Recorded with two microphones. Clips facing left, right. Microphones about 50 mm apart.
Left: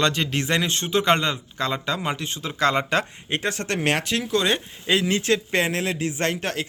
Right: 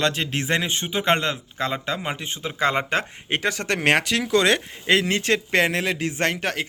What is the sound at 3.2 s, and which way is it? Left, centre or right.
Speech, right.